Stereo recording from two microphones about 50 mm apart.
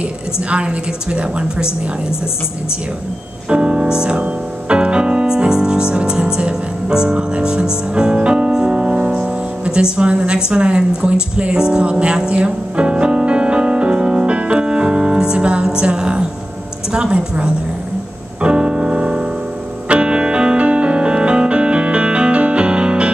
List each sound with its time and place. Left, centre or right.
0.5 s a woman's voice: right
3.4 s speech: centre
11.0 s music: right
15.8 s a woman's voice: centre
18.4 s piano: right
19.9 s music: right